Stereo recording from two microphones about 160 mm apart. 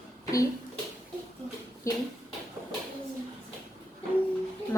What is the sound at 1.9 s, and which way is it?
Speech, 20° left (ahead or behind).